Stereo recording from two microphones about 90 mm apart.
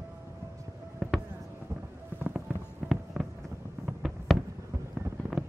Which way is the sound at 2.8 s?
10° right (ahead or behind).